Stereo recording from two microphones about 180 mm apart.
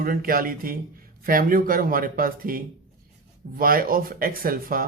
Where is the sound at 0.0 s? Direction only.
55° right (ahead or behind).